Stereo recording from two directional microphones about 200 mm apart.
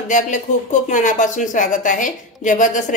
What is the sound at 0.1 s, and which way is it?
A woman's voice, 40° left (ahead or behind).